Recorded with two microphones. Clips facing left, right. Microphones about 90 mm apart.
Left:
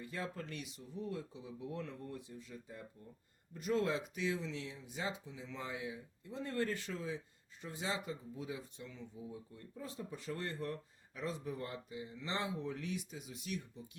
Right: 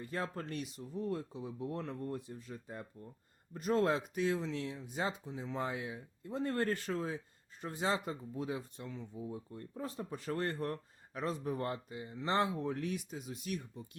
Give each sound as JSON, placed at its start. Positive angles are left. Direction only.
{"t": 0.0, "sound": "speech", "side_deg": -45}